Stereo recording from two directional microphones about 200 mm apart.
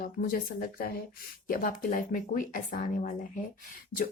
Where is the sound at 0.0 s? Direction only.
45° left (ahead or behind).